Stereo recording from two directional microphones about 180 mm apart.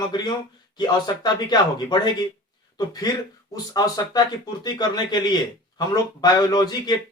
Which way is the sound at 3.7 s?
20° left (ahead or behind).